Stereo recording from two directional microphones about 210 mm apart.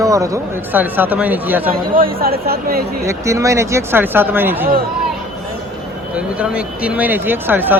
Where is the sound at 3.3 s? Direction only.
15° right (ahead or behind).